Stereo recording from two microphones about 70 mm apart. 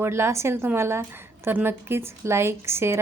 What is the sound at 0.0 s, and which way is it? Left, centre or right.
A woman's voice, right.